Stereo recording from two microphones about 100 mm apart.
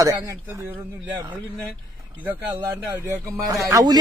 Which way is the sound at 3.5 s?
35° right (ahead or behind).